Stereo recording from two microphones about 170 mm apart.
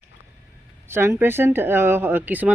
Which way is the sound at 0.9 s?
15° right (ahead or behind).